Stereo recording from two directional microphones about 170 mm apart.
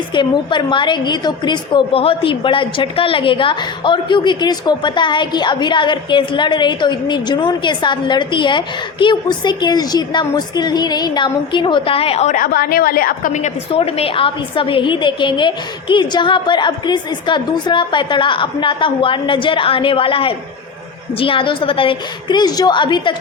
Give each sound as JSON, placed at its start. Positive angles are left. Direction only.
{"t": 0.1, "sound": "a woman's voice", "side_deg": 25}
{"t": 13.7, "sound": "a woman's voice", "side_deg": 35}